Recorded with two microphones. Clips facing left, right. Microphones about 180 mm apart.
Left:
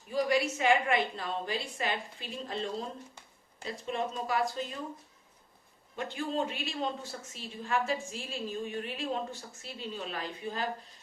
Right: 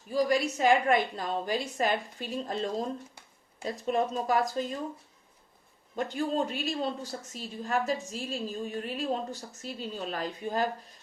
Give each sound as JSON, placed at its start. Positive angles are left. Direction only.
{"t": 0.1, "sound": "a woman's voice", "side_deg": -40}
{"t": 6.0, "sound": "a woman's voice", "side_deg": -40}